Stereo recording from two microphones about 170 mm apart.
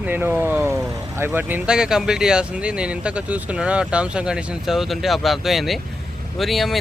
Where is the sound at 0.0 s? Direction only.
10° right (ahead or behind).